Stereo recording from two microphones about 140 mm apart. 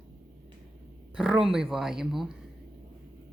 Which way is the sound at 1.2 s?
5° right (ahead or behind).